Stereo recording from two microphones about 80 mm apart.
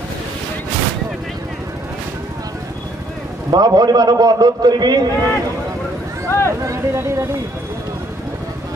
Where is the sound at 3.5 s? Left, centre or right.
Right.